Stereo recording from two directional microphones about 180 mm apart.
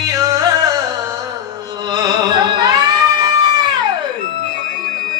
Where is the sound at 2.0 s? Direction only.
25° right (ahead or behind).